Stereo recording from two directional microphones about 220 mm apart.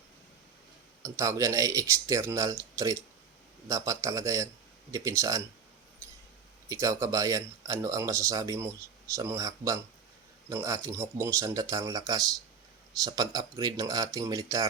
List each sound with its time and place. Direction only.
1.0 s speech: 15° right (ahead or behind)
6.0 s mouse: 15° right (ahead or behind)
6.7 s speech: 15° right (ahead or behind)